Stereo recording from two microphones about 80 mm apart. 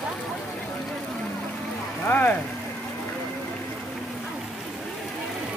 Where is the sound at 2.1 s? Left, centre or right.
Left.